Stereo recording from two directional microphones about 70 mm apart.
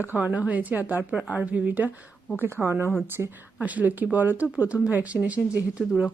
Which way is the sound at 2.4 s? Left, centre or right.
Right.